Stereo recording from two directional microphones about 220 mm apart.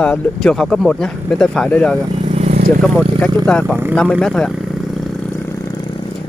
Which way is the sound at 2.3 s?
30° right (ahead or behind).